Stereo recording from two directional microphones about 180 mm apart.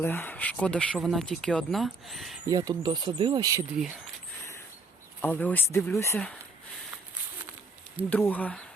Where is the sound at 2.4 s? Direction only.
20° right (ahead or behind).